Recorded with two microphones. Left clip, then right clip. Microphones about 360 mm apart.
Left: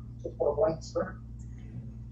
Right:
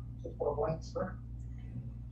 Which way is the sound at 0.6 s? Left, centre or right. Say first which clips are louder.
Left 7 dB; left.